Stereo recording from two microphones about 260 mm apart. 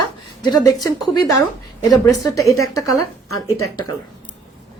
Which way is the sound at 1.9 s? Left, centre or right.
Centre.